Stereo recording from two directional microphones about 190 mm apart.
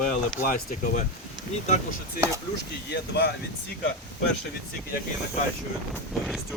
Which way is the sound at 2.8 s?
60° left (ahead or behind).